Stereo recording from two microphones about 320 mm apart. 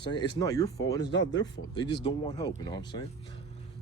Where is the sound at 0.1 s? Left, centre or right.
Centre.